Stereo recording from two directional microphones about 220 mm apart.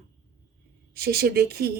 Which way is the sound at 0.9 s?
45° right (ahead or behind).